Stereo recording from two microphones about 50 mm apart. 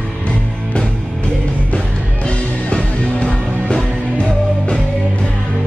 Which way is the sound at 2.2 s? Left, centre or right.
Left.